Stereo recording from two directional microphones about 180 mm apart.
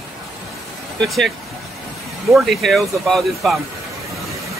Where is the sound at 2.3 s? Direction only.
Centre (ahead or behind).